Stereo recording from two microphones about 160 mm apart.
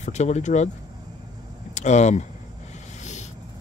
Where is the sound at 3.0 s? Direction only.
45° left (ahead or behind).